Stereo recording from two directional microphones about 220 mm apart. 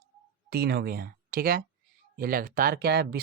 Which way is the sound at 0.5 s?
45° right (ahead or behind).